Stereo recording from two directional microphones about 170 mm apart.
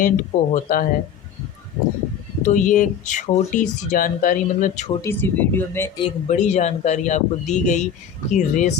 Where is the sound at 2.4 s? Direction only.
50° left (ahead or behind).